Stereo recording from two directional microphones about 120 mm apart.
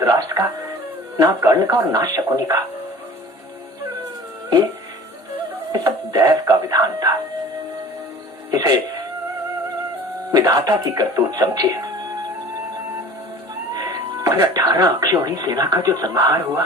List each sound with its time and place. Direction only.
0.0 s music: 30° right (ahead or behind)
1.1 s speech: 25° right (ahead or behind)
4.4 s speech: 35° right (ahead or behind)
5.7 s speech: 30° right (ahead or behind)
8.4 s speech: 30° right (ahead or behind)
10.3 s speech: 30° right (ahead or behind)
13.7 s speech: 30° right (ahead or behind)